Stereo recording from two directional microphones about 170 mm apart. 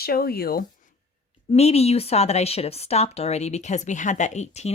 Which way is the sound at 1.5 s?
40° left (ahead or behind).